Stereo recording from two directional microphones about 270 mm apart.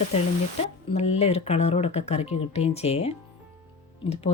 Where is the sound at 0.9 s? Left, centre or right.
Left.